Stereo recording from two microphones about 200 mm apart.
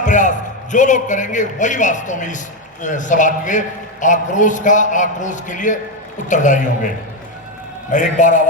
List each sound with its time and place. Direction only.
0.0 s a man's voice: 40° left (ahead or behind)
7.9 s a man's voice: 40° left (ahead or behind)